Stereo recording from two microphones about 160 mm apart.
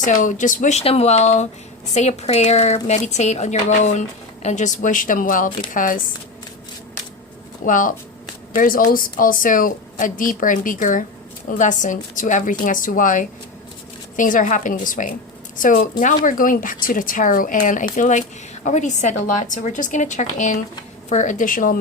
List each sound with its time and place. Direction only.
0.0 s a woman's voice: 55° left (ahead or behind)
7.6 s a woman's voice: 55° left (ahead or behind)